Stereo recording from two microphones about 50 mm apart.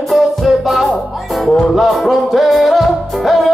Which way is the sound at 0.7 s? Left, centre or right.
Centre.